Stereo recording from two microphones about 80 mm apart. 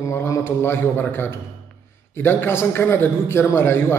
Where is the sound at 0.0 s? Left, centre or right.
Left.